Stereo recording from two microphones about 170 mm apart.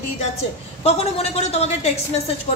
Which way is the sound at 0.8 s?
35° left (ahead or behind).